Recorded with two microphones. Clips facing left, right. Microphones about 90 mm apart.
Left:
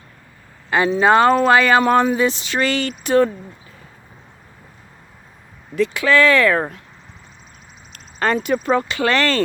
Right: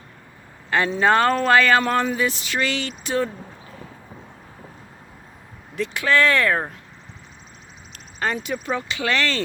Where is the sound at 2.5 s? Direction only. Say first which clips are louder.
Left 5 dB; 45° left (ahead or behind).